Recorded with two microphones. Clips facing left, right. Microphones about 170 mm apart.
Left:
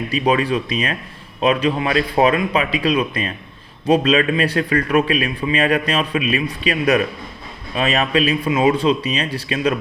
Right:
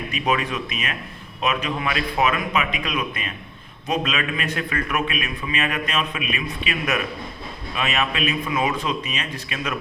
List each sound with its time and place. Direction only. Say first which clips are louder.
0.1 s speech: left 7 dB; 30° left (ahead or behind)